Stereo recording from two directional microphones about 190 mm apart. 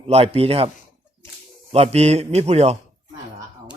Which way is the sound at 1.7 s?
35° right (ahead or behind).